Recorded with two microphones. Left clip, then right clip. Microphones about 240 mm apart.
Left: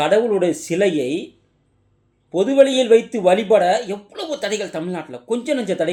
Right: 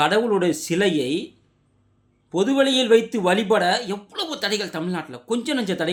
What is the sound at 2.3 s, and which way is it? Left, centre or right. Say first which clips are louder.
A man's voice: left 5 dB; centre.